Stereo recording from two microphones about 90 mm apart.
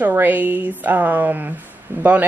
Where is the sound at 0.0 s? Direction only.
20° right (ahead or behind).